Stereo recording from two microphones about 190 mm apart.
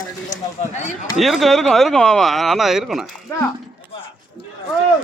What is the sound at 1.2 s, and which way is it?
Speech, centre (ahead or behind).